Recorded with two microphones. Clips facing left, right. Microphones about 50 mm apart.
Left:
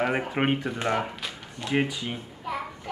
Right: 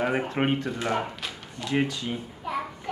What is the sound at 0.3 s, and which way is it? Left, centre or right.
Speech, centre.